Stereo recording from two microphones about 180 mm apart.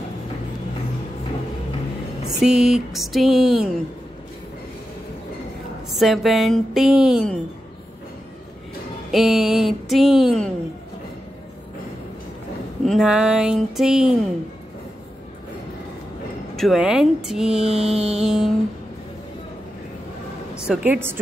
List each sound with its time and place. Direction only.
2.2 s speech: 5° right (ahead or behind)
5.9 s speech: centre (ahead or behind)
9.1 s speech: centre (ahead or behind)
12.8 s speech: centre (ahead or behind)
16.5 s speech: centre (ahead or behind)
17.6 s a sound: 35° right (ahead or behind)
18.2 s speech: centre (ahead or behind)
20.5 s a woman's voice: 5° right (ahead or behind)